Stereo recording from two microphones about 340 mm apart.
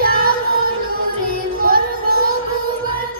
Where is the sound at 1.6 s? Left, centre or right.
Right.